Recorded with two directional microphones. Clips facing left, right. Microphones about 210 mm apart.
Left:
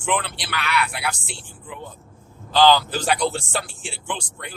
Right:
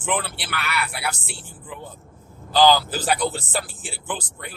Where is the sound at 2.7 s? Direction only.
5° right (ahead or behind).